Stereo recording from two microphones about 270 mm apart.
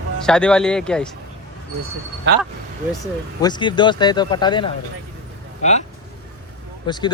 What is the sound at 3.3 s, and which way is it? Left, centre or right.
Speech, centre.